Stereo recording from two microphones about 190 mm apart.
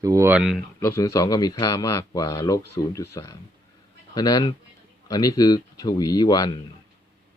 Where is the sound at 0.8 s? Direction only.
15° left (ahead or behind).